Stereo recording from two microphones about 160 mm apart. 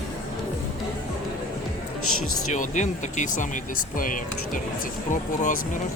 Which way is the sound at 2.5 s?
50° left (ahead or behind).